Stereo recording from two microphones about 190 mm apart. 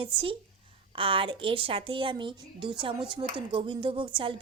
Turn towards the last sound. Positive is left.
turn(degrees=-25)  # may be behind; listen again after turning